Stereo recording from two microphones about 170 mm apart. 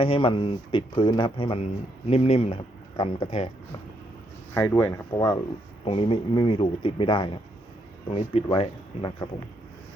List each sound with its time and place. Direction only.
0.0 s speech: 30° left (ahead or behind)
4.5 s speech: 15° left (ahead or behind)
5.8 s speech: 35° left (ahead or behind)